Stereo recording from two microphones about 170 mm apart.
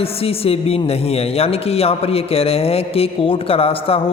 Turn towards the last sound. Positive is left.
turn(degrees=35)  # may be behind; listen again after turning